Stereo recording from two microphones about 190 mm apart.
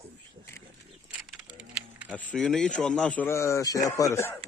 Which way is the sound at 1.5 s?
5° right (ahead or behind).